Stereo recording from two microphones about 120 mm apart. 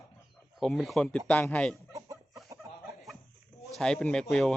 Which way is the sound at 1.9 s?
25° right (ahead or behind).